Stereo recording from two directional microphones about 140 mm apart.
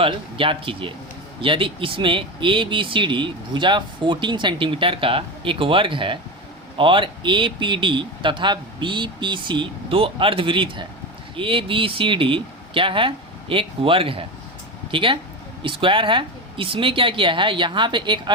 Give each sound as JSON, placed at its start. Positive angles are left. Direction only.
{"t": 0.0, "sound": "speech", "side_deg": -40}